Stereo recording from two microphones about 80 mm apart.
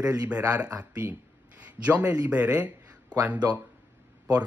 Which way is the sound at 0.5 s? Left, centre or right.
Centre.